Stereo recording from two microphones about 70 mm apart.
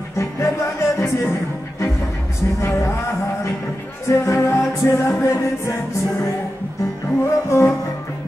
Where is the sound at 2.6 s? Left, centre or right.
Left.